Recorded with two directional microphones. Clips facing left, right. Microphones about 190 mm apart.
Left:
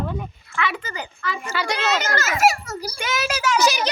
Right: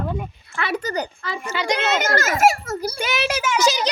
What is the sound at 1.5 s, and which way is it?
Speech, 20° right (ahead or behind).